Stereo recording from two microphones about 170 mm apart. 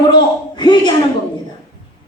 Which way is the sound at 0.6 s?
25° left (ahead or behind).